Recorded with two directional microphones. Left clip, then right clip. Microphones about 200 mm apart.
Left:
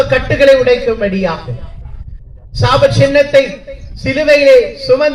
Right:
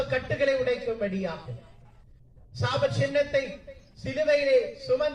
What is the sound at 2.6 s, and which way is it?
Speech, 40° left (ahead or behind).